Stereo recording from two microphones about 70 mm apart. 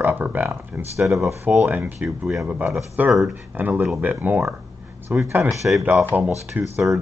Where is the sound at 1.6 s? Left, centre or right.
Right.